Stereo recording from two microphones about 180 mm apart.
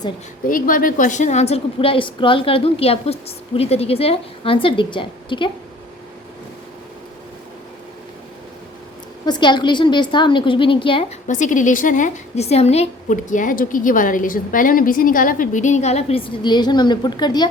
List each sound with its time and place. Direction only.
0.4 s a woman's voice: 50° left (ahead or behind); by 5.5 s 25° left (ahead or behind)
9.2 s a woman's voice: 25° left (ahead or behind)
11.3 s a woman's voice: 45° left (ahead or behind); by 17.5 s 25° left (ahead or behind)